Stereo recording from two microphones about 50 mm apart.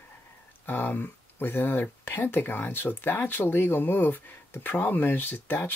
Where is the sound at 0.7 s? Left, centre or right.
Left.